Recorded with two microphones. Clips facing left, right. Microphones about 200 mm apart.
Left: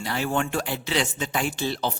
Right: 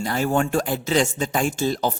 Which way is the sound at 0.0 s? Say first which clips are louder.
Right 5 dB; 45° right (ahead or behind).